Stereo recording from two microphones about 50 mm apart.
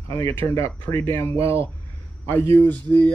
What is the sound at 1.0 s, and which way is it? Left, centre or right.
Speech, left.